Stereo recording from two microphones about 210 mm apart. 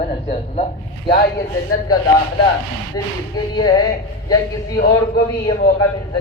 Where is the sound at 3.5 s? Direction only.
20° left (ahead or behind).